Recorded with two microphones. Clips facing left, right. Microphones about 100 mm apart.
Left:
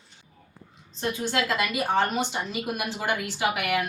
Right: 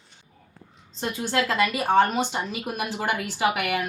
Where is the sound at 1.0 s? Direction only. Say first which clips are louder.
Right 1 dB; 25° right (ahead or behind).